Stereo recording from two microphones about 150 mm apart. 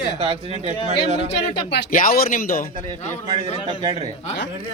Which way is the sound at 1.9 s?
70° left (ahead or behind).